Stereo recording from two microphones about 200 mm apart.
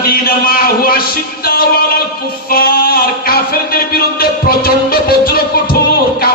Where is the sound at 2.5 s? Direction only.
45° left (ahead or behind).